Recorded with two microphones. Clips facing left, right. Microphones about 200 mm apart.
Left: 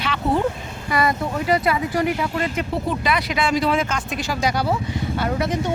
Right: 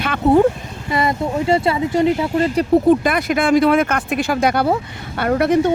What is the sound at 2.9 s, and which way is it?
Speech, 50° right (ahead or behind).